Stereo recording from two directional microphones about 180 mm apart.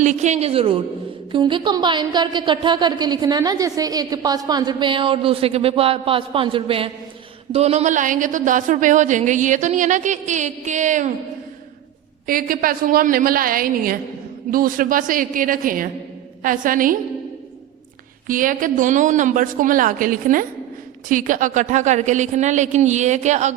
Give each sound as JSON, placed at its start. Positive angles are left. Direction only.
{"t": 0.0, "sound": "a woman's voice", "side_deg": -40}
{"t": 12.2, "sound": "speech", "side_deg": -50}
{"t": 18.3, "sound": "a woman's voice", "side_deg": -50}